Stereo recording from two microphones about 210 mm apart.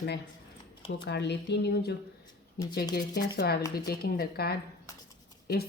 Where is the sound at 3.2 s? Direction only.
50° left (ahead or behind).